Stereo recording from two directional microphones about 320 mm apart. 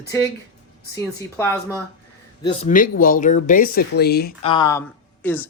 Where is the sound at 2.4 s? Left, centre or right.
Left.